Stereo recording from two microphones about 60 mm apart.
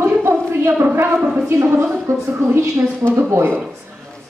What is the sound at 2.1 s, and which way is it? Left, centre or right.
Speech, right.